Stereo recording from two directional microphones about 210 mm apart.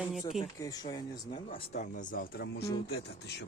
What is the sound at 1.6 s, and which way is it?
Speech, 35° left (ahead or behind).